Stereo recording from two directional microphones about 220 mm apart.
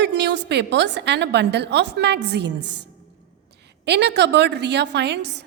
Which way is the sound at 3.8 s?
50° right (ahead or behind).